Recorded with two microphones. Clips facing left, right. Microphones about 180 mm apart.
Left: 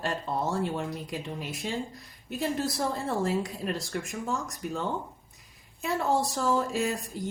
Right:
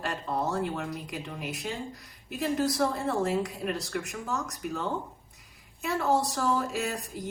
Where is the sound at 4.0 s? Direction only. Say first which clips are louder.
Left 2 dB; 30° left (ahead or behind).